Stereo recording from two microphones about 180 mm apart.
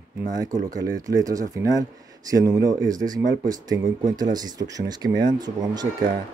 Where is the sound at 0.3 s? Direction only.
20° right (ahead or behind).